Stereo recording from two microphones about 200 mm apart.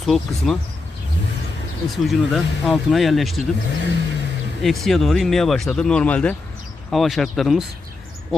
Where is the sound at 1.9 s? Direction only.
Centre (ahead or behind).